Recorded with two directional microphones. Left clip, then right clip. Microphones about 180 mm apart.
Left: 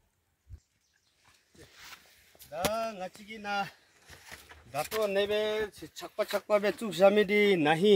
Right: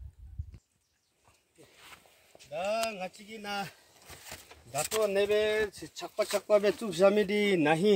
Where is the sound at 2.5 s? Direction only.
30° right (ahead or behind).